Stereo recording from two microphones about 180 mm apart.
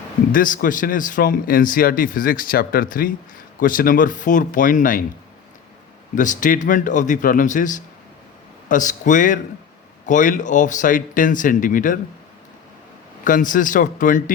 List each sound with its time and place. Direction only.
0.3 s speech: 50° left (ahead or behind)
6.1 s speech: 45° left (ahead or behind)
13.2 s speech: 45° left (ahead or behind)